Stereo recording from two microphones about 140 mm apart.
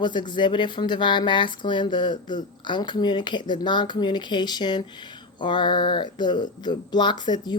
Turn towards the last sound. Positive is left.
turn(degrees=30)  # may be behind; listen again after turning